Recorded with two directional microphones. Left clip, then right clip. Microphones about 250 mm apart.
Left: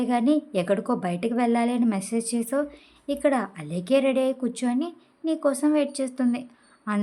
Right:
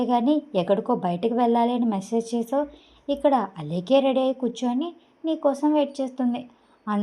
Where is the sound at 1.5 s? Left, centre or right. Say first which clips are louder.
Right 3 dB; centre.